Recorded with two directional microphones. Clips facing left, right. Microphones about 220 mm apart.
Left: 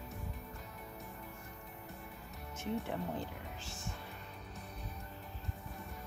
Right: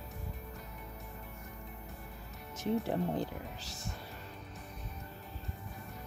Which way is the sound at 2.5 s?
35° right (ahead or behind).